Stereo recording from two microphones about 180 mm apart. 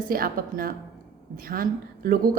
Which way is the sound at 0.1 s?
55° right (ahead or behind).